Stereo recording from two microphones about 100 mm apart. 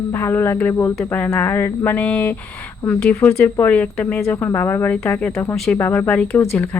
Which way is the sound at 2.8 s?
15° left (ahead or behind).